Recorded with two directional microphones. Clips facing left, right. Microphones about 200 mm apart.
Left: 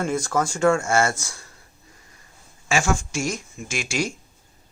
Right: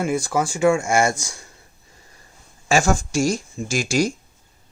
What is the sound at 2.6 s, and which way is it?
Speech, 40° right (ahead or behind).